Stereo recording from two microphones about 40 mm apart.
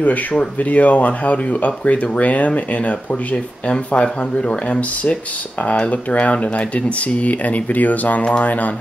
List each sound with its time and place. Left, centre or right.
0.0 s speech: left